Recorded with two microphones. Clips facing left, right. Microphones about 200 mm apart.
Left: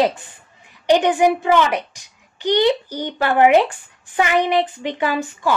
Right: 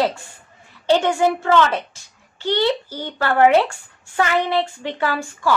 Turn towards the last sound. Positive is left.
turn(degrees=15)  # may be behind; listen again after turning